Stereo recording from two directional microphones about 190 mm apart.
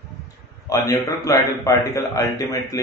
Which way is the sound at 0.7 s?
15° left (ahead or behind).